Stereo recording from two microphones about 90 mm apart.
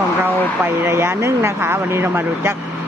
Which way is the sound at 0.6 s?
25° right (ahead or behind).